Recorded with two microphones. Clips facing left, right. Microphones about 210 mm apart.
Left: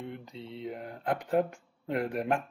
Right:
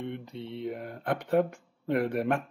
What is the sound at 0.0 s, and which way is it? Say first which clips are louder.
Speech: right 4 dB; 65° right (ahead or behind).